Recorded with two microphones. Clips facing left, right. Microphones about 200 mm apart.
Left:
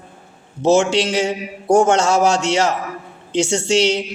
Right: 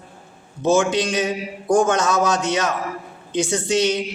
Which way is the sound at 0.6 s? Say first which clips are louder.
Left 3 dB; 25° left (ahead or behind).